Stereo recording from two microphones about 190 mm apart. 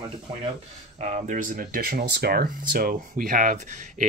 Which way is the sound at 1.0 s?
40° right (ahead or behind).